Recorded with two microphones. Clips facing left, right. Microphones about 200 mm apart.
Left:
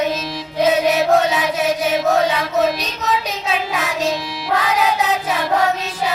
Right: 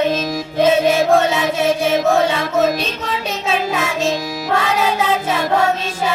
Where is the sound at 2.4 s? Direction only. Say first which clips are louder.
Right 1 dB; 50° right (ahead or behind).